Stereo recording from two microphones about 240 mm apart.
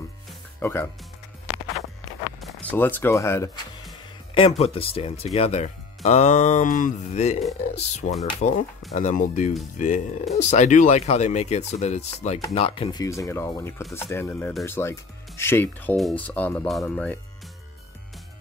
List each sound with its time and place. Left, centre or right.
0.3 s music: centre
2.4 s speech: centre
4.3 s speech: left; by 17.2 s centre